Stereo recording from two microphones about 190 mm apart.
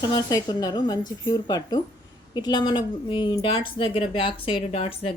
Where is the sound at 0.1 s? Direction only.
20° left (ahead or behind).